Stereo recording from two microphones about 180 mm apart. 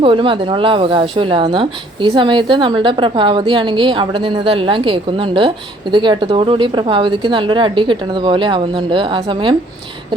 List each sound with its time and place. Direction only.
0.0 s speech: 30° right (ahead or behind)